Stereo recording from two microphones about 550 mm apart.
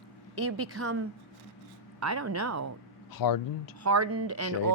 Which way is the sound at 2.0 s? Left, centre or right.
Right.